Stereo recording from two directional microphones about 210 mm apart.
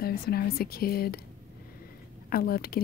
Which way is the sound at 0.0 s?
45° left (ahead or behind).